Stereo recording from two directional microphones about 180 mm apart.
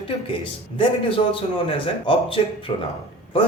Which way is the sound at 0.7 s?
30° left (ahead or behind).